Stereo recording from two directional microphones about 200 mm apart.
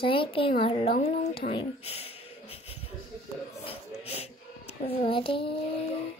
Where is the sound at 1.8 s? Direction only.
30° left (ahead or behind).